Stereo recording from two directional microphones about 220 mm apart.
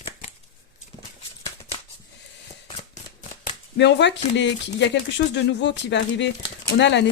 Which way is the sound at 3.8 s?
50° left (ahead or behind).